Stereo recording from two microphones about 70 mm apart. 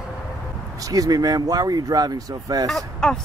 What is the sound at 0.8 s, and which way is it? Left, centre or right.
Speech, right.